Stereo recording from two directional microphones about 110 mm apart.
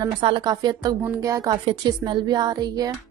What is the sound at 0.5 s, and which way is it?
Speech, 40° right (ahead or behind).